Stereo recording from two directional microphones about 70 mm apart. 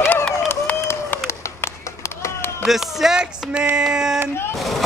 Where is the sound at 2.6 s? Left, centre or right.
Centre.